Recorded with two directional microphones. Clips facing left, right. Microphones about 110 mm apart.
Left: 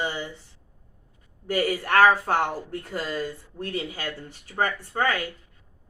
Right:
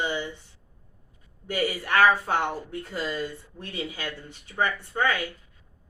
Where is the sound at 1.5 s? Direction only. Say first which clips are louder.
Left 3 dB; 45° left (ahead or behind).